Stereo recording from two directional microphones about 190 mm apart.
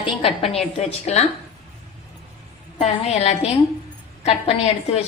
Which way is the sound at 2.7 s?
35° left (ahead or behind).